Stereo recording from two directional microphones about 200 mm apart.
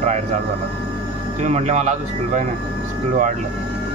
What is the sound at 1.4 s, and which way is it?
Speech, 35° right (ahead or behind).